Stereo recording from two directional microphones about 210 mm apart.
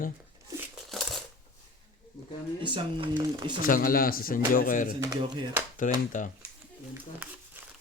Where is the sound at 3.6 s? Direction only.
40° left (ahead or behind).